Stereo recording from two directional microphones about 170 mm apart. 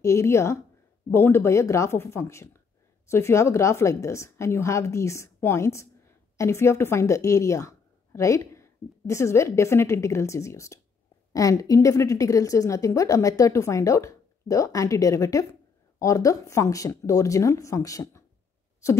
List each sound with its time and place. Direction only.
0.0 s a woman's voice: 15° left (ahead or behind)